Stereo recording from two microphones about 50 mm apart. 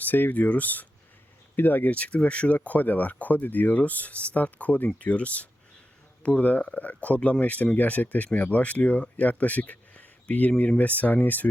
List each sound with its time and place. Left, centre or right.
0.0 s speech: left
2.0 s speech: left
2.6 s speech: left